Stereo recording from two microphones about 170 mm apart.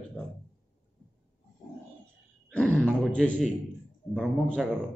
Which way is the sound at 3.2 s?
45° left (ahead or behind).